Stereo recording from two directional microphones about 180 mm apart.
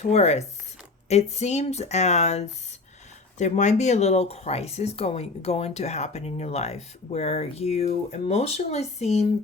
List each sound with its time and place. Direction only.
0.0 s speech: 35° left (ahead or behind)